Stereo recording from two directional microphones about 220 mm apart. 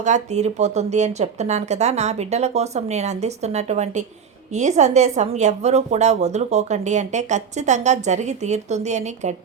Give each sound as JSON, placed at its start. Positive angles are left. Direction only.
{"t": 0.0, "sound": "a woman's voice", "side_deg": -30}